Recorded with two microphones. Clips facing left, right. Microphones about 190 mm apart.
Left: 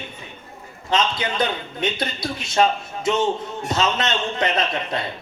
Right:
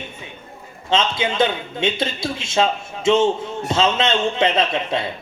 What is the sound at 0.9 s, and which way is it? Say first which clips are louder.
A man's voice: right 2 dB; 25° right (ahead or behind).